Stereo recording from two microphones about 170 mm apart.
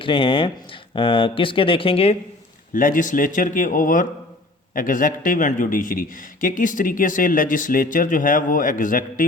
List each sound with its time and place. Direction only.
0.0 s speech: 30° left (ahead or behind)
2.7 s speech: 55° left (ahead or behind)